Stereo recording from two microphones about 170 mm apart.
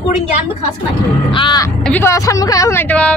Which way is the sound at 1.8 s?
10° left (ahead or behind).